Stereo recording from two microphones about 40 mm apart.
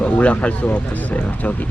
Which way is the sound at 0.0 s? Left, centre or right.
Left.